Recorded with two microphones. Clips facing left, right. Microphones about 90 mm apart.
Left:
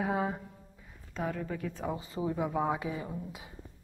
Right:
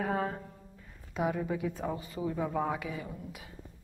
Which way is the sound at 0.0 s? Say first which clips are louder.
Left 1 dB; 10° left (ahead or behind).